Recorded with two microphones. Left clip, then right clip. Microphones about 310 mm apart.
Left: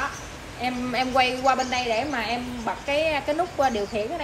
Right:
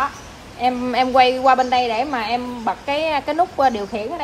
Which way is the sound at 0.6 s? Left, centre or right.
Right.